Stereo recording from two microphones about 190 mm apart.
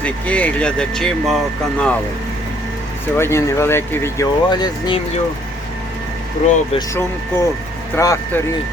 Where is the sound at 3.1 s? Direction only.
15° left (ahead or behind).